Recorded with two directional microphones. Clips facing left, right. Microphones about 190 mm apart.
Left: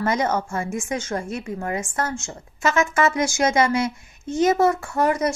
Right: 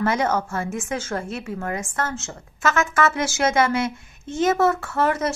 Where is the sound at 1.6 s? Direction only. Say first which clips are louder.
Left 1 dB; 15° left (ahead or behind).